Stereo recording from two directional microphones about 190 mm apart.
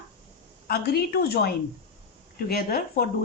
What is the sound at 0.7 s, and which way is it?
Speech, 55° left (ahead or behind).